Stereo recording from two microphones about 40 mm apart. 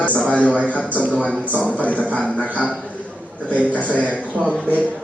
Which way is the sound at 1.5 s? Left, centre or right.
Right.